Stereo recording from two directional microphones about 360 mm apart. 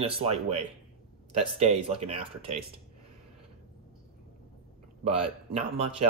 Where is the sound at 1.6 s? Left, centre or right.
Centre.